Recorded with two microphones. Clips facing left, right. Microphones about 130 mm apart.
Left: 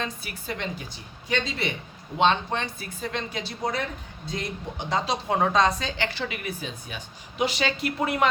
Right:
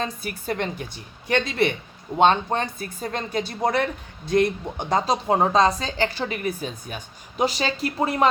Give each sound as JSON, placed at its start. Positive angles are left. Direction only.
{"t": 0.0, "sound": "a woman's voice", "side_deg": -45}